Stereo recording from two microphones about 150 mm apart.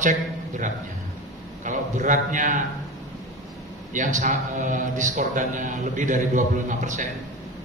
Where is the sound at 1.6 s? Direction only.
60° right (ahead or behind).